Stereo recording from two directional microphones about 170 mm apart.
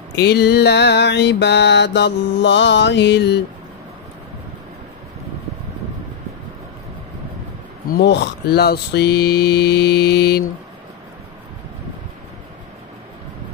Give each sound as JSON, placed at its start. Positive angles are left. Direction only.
{"t": 0.2, "sound": "mantra", "side_deg": 75}
{"t": 7.9, "sound": "mantra", "side_deg": 80}